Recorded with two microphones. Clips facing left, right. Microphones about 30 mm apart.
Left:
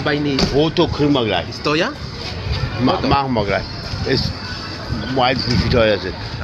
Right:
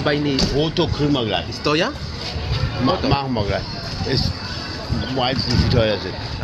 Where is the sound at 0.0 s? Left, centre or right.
Centre.